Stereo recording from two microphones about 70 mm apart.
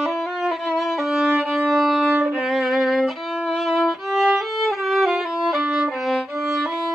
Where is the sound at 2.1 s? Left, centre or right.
Centre.